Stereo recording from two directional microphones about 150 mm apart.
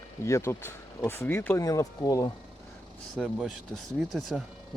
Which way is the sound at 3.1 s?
5° left (ahead or behind).